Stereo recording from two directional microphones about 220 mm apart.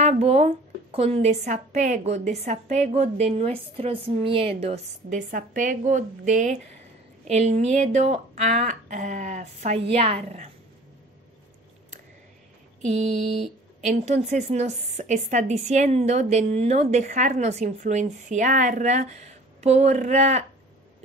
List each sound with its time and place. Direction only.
0.0 s a woman's voice: 30° right (ahead or behind)
12.8 s a woman's voice: 30° right (ahead or behind)